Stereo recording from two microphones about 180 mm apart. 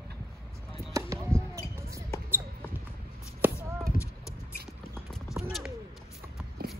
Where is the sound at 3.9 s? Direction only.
50° left (ahead or behind).